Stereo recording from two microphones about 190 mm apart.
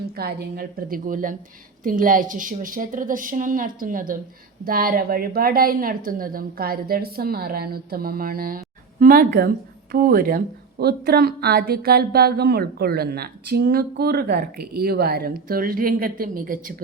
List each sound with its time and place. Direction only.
0.2 s a woman's voice: 55° right (ahead or behind)